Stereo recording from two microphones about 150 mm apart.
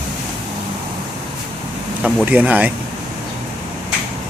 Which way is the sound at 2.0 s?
10° right (ahead or behind).